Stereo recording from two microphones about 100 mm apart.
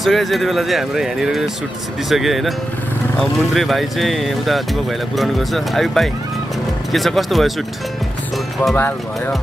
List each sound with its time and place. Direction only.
0.0 s speech: centre (ahead or behind)
8.7 s speech: 20° left (ahead or behind)